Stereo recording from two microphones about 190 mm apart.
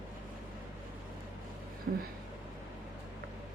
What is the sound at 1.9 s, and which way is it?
Speech, 65° right (ahead or behind).